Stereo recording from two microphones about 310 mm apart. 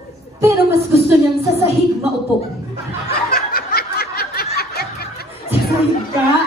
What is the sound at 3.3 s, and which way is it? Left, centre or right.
Snicker, left.